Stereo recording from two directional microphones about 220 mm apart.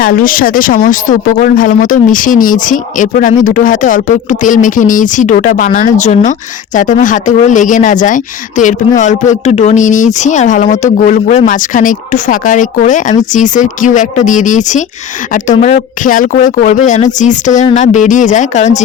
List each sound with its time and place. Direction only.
0.0 s speech: 40° left (ahead or behind)